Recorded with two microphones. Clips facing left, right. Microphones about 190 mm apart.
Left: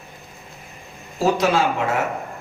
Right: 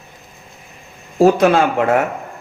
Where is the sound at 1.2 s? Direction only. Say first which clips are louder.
Right 7 dB; 55° right (ahead or behind).